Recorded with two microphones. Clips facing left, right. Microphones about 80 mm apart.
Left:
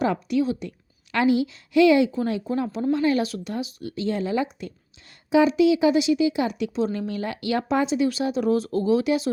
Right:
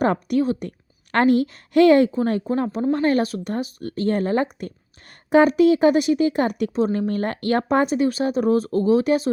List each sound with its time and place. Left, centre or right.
0.0 s speech: right
2.5 s speech: right